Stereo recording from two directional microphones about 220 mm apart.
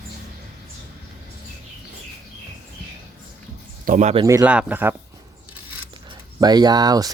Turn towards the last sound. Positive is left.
turn(degrees=-20)  # may be behind; listen again after turning